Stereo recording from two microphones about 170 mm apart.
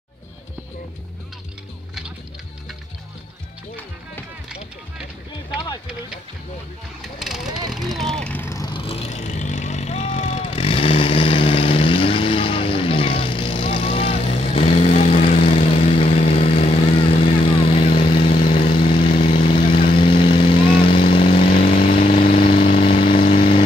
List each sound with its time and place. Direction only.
7.0 s speech: centre (ahead or behind)
7.7 s vehicle: centre (ahead or behind); by 21.8 s 30° left (ahead or behind)
22.1 s vehicle: 50° left (ahead or behind)
22.4 s vehicle: 30° left (ahead or behind)